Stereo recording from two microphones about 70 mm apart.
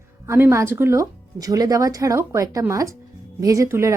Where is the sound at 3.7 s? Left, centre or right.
Right.